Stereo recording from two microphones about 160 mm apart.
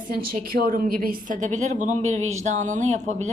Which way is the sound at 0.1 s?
65° right (ahead or behind).